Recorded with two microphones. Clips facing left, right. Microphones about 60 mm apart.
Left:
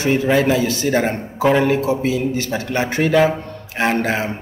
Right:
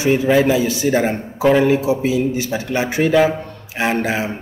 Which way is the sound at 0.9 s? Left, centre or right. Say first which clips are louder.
Right 1 dB; centre.